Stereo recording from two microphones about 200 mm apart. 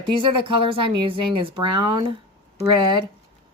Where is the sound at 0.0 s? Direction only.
25° right (ahead or behind).